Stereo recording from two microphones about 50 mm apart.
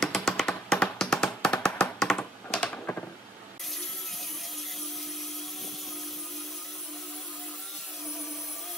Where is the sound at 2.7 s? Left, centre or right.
Left.